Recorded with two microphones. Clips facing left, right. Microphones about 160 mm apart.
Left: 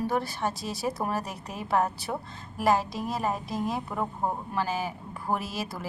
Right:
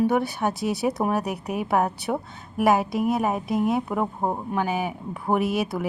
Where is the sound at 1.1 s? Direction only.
65° right (ahead or behind).